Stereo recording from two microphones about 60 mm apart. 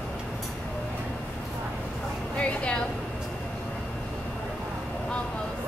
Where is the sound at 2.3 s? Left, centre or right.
Centre.